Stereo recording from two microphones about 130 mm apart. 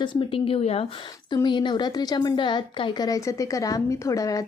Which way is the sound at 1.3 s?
35° left (ahead or behind).